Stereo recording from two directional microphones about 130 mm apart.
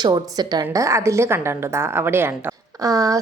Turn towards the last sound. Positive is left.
turn(degrees=-25)  # may be behind; listen again after turning